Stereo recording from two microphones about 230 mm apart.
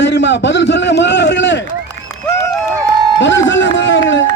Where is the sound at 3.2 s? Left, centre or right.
Left.